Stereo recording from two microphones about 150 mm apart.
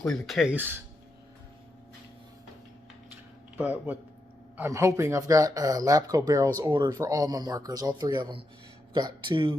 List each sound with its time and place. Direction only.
0.0 s speech: 5° left (ahead or behind)
0.5 s speech: 15° right (ahead or behind)
3.6 s speech: 10° right (ahead or behind); by 9.6 s 35° right (ahead or behind)